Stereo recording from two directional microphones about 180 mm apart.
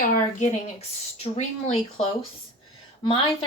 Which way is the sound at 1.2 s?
35° left (ahead or behind).